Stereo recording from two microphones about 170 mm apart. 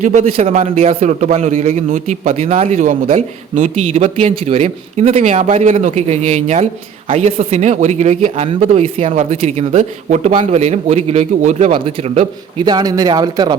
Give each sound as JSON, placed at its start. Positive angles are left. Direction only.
{"t": 0.0, "sound": "a man's voice", "side_deg": -45}